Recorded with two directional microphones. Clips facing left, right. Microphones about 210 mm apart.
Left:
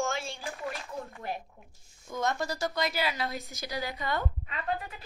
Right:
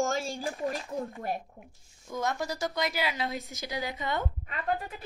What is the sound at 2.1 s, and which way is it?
A woman's voice, 10° right (ahead or behind).